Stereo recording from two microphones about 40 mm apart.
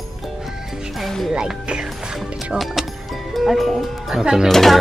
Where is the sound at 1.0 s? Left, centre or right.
Centre.